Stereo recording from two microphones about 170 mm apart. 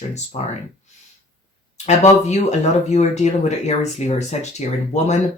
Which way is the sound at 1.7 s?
40° left (ahead or behind).